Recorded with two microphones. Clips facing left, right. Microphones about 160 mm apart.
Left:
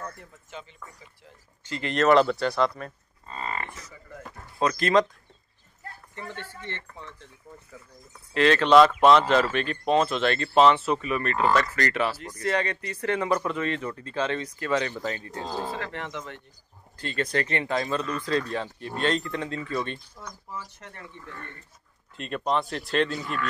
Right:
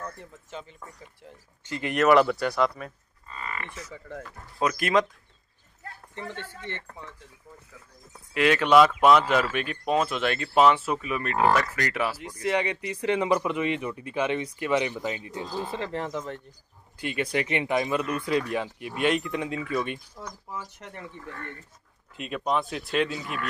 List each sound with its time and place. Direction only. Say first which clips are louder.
0.5 s speech: right 1 dB; 35° right (ahead or behind)
1.6 s speech: even; 15° right (ahead or behind)
3.3 s livestock: left 4 dB; 30° left (ahead or behind)
4.6 s speech: left 2 dB; 10° right (ahead or behind)
6.1 s speech: right 1 dB; 15° right (ahead or behind)
8.3 s speech: left 2 dB; 10° right (ahead or behind)
15.8 s speech: right 4 dB; 35° right (ahead or behind)
16.9 s speech: even; 15° right (ahead or behind)
22.1 s speech: left 1 dB; 5° right (ahead or behind)